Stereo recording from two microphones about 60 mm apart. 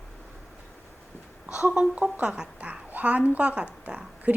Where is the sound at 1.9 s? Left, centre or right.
Right.